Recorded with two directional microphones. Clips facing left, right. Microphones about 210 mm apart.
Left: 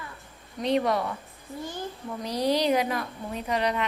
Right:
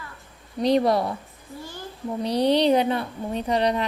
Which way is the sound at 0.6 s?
35° right (ahead or behind).